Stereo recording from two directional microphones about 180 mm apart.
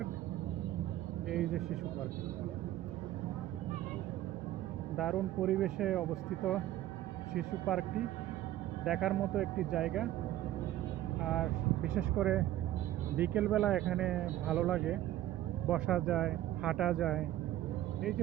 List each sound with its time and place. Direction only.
1.3 s speech: centre (ahead or behind)
4.9 s speech: centre (ahead or behind)
11.9 s speech: 5° right (ahead or behind)